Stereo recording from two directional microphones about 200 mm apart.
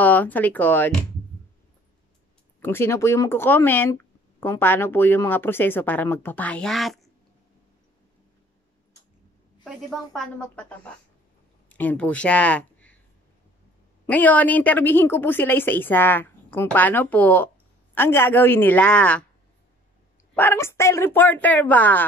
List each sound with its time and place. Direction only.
0.0 s speech: 10° left (ahead or behind)
2.6 s speech: 10° left (ahead or behind)
9.7 s speech: centre (ahead or behind)
14.0 s speech: 5° left (ahead or behind)
20.3 s speech: 10° left (ahead or behind)